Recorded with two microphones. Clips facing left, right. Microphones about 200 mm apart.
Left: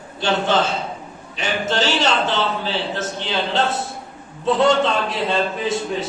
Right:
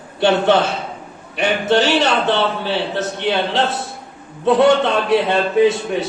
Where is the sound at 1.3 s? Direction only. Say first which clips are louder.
Right 6 dB; 60° right (ahead or behind).